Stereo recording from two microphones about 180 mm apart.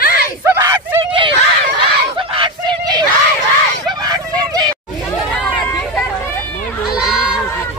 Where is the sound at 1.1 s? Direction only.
30° right (ahead or behind).